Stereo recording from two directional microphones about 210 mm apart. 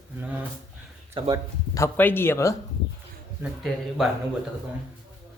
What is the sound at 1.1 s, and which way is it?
Speech, 25° right (ahead or behind).